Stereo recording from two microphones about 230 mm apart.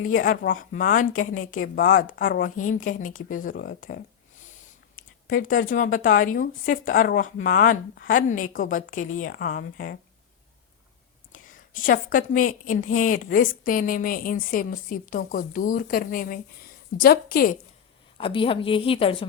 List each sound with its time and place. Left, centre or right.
0.0 s a woman's voice: left
5.3 s a woman's voice: left
11.3 s a woman's voice: left
18.2 s a woman's voice: left